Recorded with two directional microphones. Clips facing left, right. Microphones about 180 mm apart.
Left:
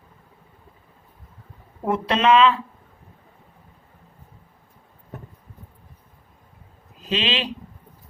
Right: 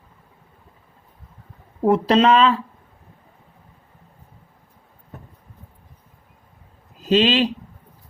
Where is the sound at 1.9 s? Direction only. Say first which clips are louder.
Right 3 dB; 35° right (ahead or behind).